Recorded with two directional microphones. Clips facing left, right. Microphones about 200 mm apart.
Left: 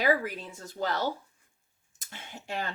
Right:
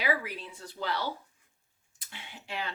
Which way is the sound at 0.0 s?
45° left (ahead or behind).